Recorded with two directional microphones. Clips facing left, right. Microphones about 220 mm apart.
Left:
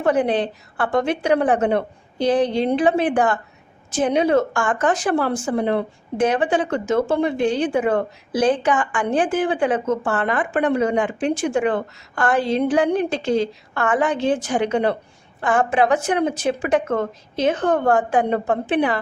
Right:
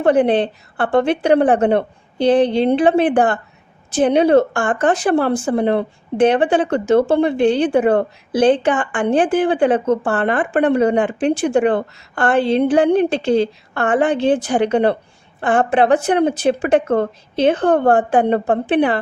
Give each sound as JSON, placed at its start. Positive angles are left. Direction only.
{"t": 0.0, "sound": "a woman's voice", "side_deg": -30}